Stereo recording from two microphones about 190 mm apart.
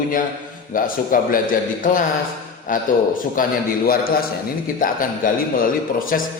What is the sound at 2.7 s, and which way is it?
Speech, 45° left (ahead or behind).